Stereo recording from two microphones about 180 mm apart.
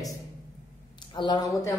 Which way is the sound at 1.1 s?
25° left (ahead or behind).